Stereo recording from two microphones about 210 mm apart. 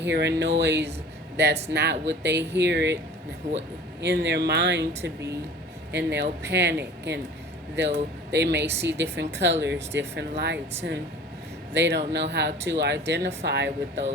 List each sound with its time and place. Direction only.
0.0 s speech: 55° right (ahead or behind)
4.0 s speech: 55° right (ahead or behind)